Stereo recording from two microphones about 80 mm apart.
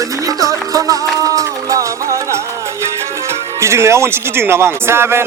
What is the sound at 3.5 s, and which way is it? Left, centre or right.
Speech, right.